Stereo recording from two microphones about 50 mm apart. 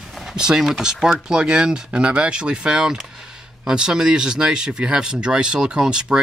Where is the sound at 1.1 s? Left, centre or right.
Centre.